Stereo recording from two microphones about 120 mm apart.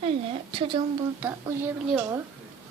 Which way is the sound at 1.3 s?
20° right (ahead or behind).